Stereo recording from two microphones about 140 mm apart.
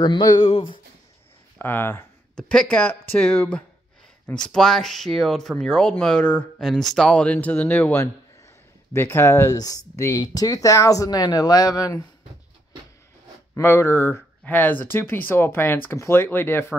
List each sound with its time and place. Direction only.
0.0 s speech: 30° left (ahead or behind)
0.5 s a sound: 40° left (ahead or behind)
1.6 s speech: 15° left (ahead or behind)
13.6 s speech: 20° left (ahead or behind)